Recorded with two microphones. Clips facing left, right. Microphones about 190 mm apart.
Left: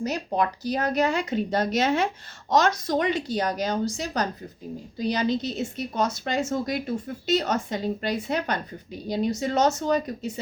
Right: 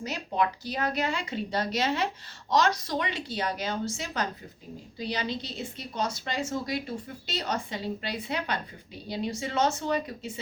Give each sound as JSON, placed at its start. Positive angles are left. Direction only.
{"t": 0.0, "sound": "a woman's voice", "side_deg": 40}